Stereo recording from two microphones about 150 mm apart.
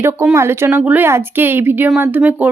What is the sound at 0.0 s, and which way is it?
Speech, 15° right (ahead or behind).